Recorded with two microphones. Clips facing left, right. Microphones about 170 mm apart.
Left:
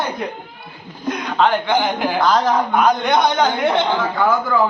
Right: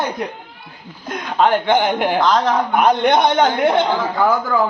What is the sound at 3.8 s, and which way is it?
Speech, 10° right (ahead or behind).